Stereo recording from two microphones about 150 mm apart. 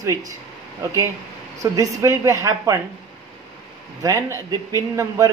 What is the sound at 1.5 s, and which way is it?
Speech, 20° right (ahead or behind).